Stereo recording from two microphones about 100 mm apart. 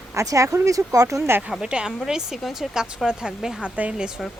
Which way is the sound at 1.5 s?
5° right (ahead or behind).